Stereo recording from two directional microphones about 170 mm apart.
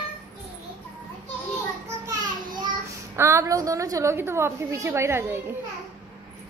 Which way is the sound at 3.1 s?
15° right (ahead or behind).